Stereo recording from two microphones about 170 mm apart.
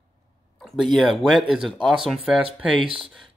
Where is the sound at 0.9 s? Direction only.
Centre (ahead or behind).